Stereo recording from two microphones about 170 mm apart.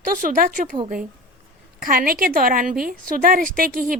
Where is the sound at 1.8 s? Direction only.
55° right (ahead or behind).